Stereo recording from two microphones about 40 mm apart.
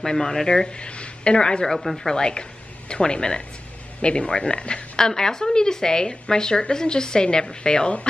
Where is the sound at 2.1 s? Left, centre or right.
Centre.